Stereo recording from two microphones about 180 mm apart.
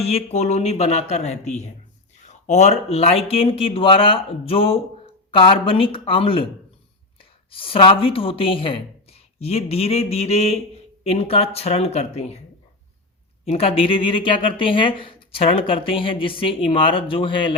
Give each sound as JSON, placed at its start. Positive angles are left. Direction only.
{"t": 0.0, "sound": "a woman's voice", "side_deg": 35}
{"t": 13.4, "sound": "speech", "side_deg": 30}